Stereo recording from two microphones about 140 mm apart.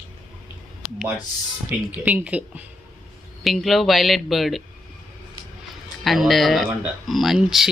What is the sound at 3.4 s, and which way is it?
Speech, centre (ahead or behind).